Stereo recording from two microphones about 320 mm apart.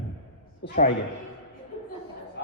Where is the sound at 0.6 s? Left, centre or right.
Left.